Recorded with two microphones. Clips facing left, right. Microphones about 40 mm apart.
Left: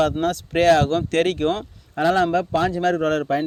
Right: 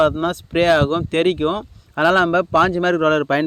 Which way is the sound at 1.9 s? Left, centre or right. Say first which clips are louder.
Right 4 dB; right.